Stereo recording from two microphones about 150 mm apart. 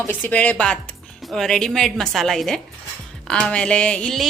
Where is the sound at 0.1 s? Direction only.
10° left (ahead or behind).